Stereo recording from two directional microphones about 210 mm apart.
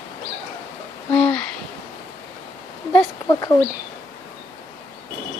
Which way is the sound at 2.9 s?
15° left (ahead or behind).